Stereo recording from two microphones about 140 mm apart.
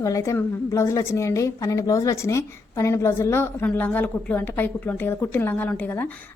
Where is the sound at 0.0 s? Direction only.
25° left (ahead or behind).